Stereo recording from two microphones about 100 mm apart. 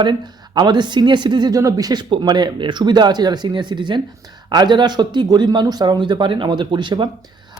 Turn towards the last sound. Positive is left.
turn(degrees=-50)  # may be behind; listen again after turning